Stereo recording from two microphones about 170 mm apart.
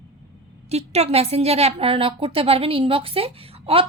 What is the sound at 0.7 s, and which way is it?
A woman's voice, 35° right (ahead or behind).